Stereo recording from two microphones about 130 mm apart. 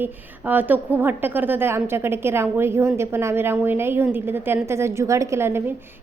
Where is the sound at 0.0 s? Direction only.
15° right (ahead or behind).